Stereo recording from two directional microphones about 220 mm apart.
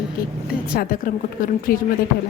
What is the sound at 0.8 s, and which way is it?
Speech, 40° left (ahead or behind).